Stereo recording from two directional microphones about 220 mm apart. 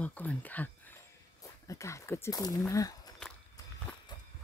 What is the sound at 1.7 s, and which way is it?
Speech, 15° left (ahead or behind).